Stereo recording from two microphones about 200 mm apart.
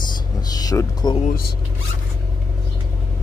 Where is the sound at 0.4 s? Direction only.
20° left (ahead or behind).